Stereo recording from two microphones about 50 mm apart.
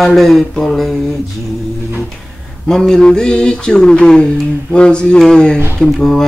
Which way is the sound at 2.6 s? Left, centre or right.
Centre.